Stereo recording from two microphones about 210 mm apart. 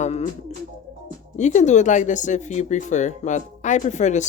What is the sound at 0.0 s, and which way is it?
Bird, 30° left (ahead or behind).